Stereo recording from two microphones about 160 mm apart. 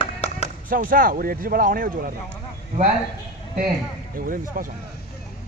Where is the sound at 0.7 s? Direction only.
60° right (ahead or behind).